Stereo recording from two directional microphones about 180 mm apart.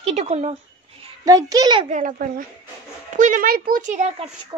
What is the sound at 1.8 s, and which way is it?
Speech, 45° right (ahead or behind).